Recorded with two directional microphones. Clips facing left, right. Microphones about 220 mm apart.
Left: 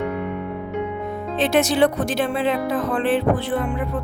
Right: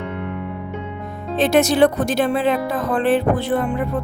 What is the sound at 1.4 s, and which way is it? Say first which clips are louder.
Speech: right 3 dB; 40° right (ahead or behind).